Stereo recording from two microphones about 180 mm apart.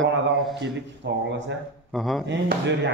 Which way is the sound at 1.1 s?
75° right (ahead or behind).